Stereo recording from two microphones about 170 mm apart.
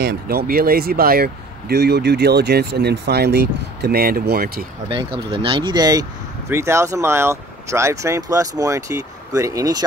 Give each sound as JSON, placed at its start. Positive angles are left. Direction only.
{"t": 0.0, "sound": "speech", "side_deg": -65}
{"t": 5.3, "sound": "speech", "side_deg": -30}